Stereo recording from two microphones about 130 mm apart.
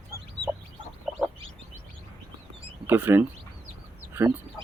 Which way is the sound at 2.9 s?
15° right (ahead or behind).